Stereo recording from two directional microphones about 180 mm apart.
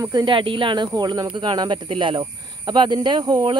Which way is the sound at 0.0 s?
25° right (ahead or behind).